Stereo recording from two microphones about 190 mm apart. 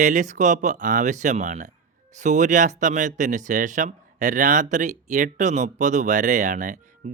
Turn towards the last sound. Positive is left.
turn(degrees=-40)  # may be behind; listen again after turning